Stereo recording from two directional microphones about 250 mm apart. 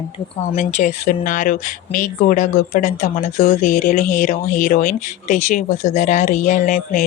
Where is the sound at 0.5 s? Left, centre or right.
Left.